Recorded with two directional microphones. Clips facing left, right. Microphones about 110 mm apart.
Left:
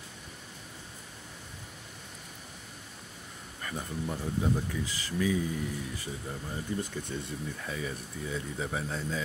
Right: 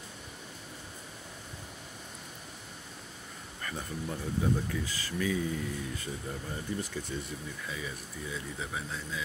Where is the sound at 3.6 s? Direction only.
20° left (ahead or behind).